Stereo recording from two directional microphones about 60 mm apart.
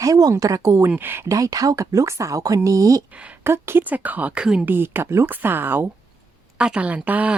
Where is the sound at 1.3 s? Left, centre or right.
Right.